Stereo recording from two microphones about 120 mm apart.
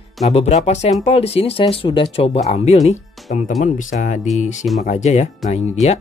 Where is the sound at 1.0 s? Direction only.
55° left (ahead or behind).